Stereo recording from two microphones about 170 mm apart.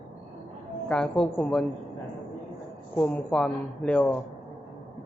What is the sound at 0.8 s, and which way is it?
Speech, 5° left (ahead or behind).